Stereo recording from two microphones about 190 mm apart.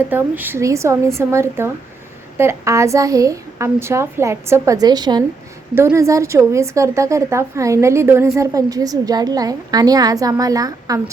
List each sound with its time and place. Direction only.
0.1 s a woman's voice: 10° right (ahead or behind)